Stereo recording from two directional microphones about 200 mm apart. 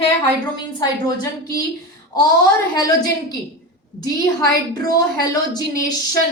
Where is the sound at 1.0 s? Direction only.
20° left (ahead or behind).